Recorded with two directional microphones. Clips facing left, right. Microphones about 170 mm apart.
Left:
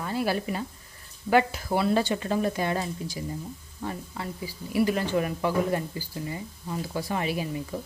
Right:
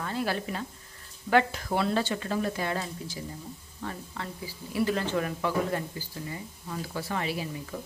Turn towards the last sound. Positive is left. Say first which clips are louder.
# left 4 dB
turn(degrees=15)  # may be behind; listen again after turning